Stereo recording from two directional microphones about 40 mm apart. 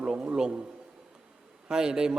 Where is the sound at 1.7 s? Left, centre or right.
Centre.